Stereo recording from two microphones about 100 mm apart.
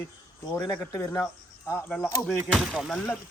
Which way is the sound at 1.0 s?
30° left (ahead or behind).